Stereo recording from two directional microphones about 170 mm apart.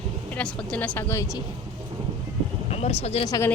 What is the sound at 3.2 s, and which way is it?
Speech, 20° left (ahead or behind).